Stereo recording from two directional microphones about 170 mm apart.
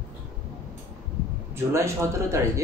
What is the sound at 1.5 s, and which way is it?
Speech, 15° right (ahead or behind).